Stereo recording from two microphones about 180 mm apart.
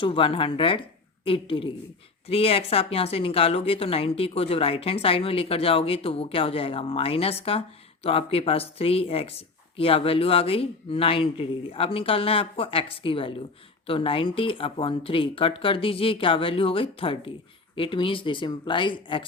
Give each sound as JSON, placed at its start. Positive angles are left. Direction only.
{"t": 0.0, "sound": "speech", "side_deg": 30}